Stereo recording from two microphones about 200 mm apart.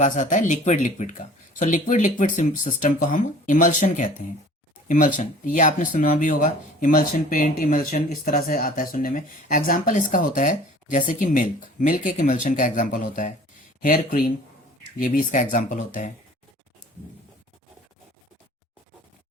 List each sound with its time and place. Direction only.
0.0 s speech: 40° left (ahead or behind)